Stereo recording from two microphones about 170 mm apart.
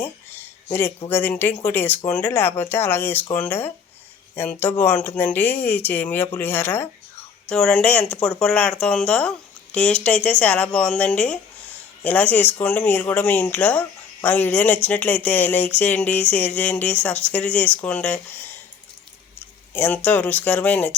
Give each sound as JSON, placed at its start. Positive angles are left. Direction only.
{"t": 0.0, "sound": "a sound", "side_deg": 15}
{"t": 1.0, "sound": "speech", "side_deg": 10}
{"t": 19.7, "sound": "speech", "side_deg": 10}